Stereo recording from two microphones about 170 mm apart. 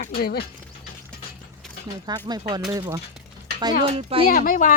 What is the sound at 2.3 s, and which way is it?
Speech, 25° right (ahead or behind).